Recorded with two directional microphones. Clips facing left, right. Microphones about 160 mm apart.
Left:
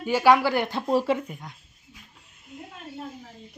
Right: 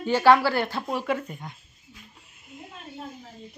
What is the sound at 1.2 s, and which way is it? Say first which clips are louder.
Speech: even; centre (ahead or behind).